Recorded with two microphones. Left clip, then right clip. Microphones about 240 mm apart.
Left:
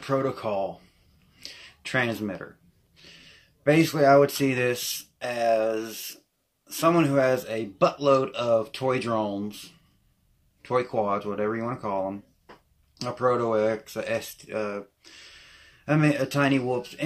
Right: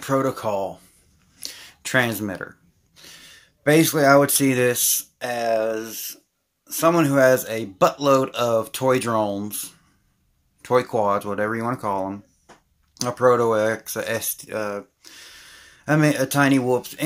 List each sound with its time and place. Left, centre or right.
0.0 s speech: right